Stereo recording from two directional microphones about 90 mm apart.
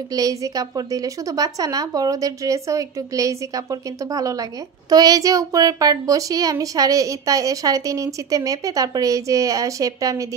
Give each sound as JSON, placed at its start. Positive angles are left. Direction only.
{"t": 0.1, "sound": "a woman's voice", "side_deg": -40}